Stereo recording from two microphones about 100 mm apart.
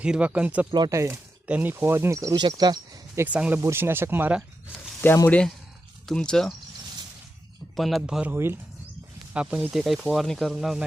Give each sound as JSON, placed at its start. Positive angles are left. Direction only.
{"t": 0.0, "sound": "speech", "side_deg": -10}
{"t": 0.9, "sound": "speech", "side_deg": -30}
{"t": 1.5, "sound": "speech", "side_deg": -15}
{"t": 2.3, "sound": "speech", "side_deg": -45}
{"t": 3.2, "sound": "speech", "side_deg": -15}
{"t": 3.6, "sound": "speech", "side_deg": -25}
{"t": 4.9, "sound": "speech", "side_deg": 25}
{"t": 5.3, "sound": "speech", "side_deg": 10}
{"t": 7.8, "sound": "speech", "side_deg": 0}
{"t": 8.3, "sound": "speech", "side_deg": -25}
{"t": 9.3, "sound": "speech", "side_deg": -10}